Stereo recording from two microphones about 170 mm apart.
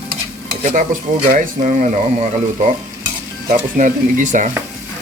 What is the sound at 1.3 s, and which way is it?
Speech, 50° right (ahead or behind).